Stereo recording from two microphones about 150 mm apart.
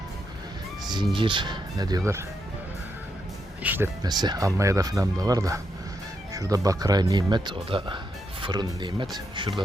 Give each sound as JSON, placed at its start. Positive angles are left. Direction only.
{"t": 1.1, "sound": "speech", "side_deg": -35}
{"t": 3.6, "sound": "speech", "side_deg": -10}
{"t": 4.0, "sound": "speech", "side_deg": -25}